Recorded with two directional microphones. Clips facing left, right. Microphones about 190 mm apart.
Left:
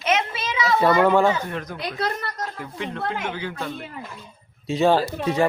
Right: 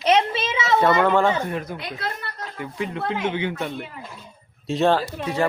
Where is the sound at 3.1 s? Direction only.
20° right (ahead or behind).